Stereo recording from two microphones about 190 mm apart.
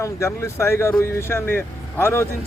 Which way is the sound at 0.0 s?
15° left (ahead or behind).